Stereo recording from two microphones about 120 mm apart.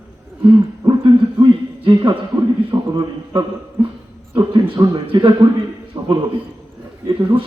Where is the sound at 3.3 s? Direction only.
45° right (ahead or behind).